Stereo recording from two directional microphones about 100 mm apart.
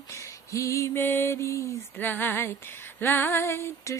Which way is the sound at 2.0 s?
20° left (ahead or behind).